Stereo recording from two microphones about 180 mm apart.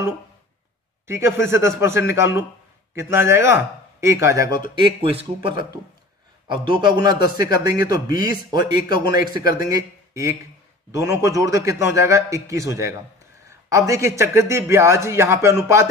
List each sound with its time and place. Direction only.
1.0 s a man's voice: 15° right (ahead or behind)
4.7 s a man's voice: 30° right (ahead or behind)